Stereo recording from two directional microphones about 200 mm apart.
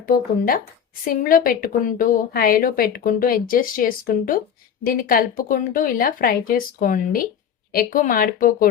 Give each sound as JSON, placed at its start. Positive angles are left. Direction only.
{"t": 0.0, "sound": "a woman's voice", "side_deg": 45}